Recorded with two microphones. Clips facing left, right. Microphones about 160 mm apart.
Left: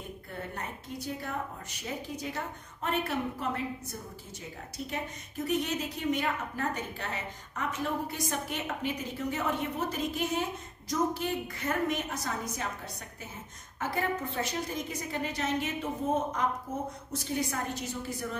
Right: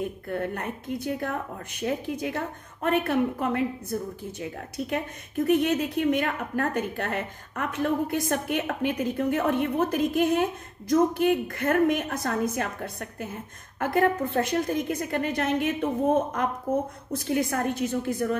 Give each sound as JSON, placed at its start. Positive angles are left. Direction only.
{"t": 0.3, "sound": "a woman's voice", "side_deg": -55}